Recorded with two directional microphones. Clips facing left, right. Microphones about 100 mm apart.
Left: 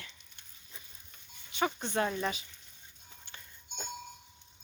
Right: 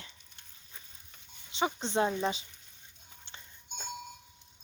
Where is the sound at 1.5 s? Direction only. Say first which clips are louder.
Right 1 dB; 25° right (ahead or behind).